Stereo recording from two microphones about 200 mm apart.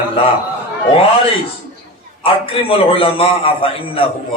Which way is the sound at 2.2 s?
30° left (ahead or behind).